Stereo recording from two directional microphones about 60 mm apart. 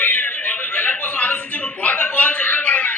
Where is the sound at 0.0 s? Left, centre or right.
Left.